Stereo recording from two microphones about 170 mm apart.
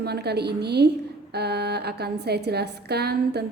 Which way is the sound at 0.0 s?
70° right (ahead or behind).